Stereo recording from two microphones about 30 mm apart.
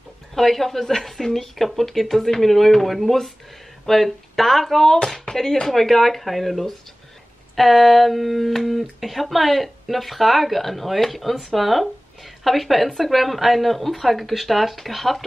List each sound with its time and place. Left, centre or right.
0.3 s speech: centre
5.7 s speech: centre